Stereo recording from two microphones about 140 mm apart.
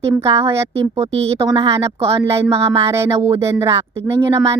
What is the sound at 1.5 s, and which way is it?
Speech, 45° right (ahead or behind).